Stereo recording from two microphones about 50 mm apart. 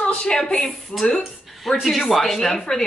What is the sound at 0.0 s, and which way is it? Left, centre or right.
Speech, centre.